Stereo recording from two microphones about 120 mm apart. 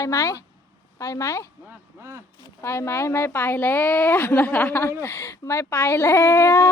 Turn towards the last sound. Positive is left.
turn(degrees=20)  # may be behind; listen again after turning